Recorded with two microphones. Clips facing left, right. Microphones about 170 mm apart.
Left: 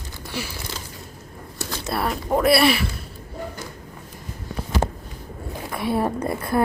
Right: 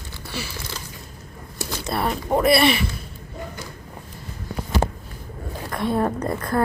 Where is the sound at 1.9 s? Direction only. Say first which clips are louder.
Even; centre (ahead or behind).